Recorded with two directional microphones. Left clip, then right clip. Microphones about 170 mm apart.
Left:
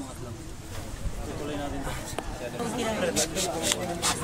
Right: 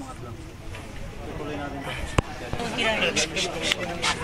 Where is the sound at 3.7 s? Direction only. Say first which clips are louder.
Right 4 dB; 45° left (ahead or behind).